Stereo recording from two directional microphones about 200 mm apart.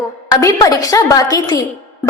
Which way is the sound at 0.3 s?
15° left (ahead or behind).